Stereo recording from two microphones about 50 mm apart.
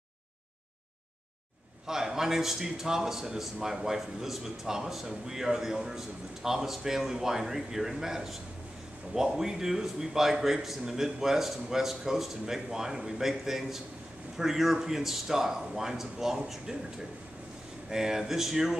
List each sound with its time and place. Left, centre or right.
1.9 s speech: centre
17.8 s speech: centre